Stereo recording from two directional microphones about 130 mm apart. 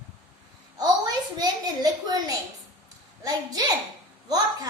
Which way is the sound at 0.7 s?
30° right (ahead or behind).